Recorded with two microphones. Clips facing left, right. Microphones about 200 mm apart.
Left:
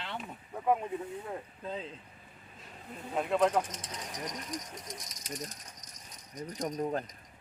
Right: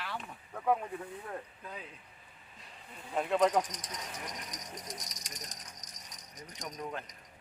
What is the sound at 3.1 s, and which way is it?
Speech, 5° left (ahead or behind).